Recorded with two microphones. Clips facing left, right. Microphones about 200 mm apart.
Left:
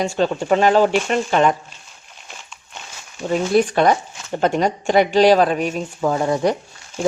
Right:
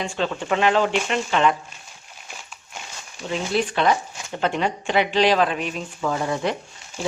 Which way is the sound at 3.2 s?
45° left (ahead or behind).